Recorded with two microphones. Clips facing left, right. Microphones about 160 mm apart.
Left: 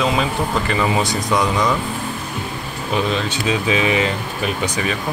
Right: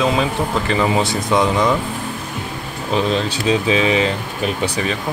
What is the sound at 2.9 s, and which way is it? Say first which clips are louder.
Speech: right 2 dB; 35° right (ahead or behind).